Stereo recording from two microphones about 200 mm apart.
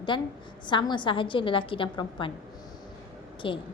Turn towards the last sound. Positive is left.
turn(degrees=25)  # may be behind; listen again after turning